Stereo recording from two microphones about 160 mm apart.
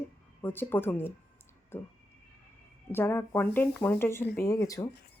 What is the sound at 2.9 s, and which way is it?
Speech, 15° left (ahead or behind).